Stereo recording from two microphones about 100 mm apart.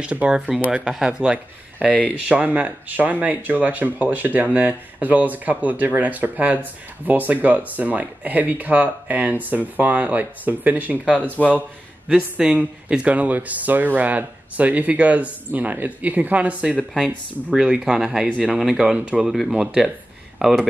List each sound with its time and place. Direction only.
0.0 s speech: 10° right (ahead or behind)
1.9 s speech: 15° left (ahead or behind)
2.1 s speech: 15° right (ahead or behind)
12.4 s speech: 10° right (ahead or behind)